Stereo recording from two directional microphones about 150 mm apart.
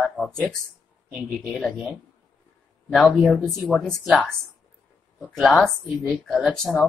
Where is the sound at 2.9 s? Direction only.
Centre (ahead or behind).